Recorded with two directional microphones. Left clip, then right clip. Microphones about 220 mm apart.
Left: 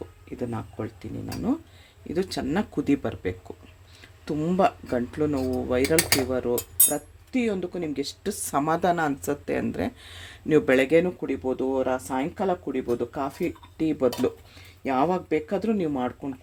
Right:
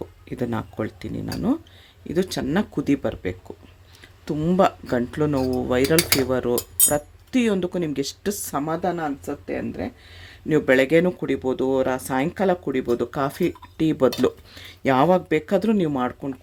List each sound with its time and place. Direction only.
0.3 s speech: 20° right (ahead or behind)
8.5 s speech: 10° left (ahead or behind)
10.5 s speech: 5° right (ahead or behind)